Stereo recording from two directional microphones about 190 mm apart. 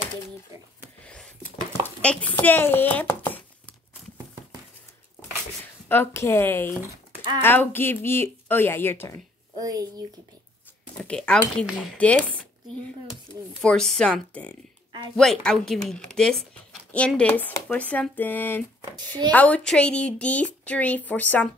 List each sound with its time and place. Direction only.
1.0 s a sound: 5° left (ahead or behind)
2.0 s speech: 5° left (ahead or behind)
5.9 s a woman's voice: 10° left (ahead or behind)
9.6 s speech: 20° right (ahead or behind)
11.0 s a woman's voice: 5° left (ahead or behind)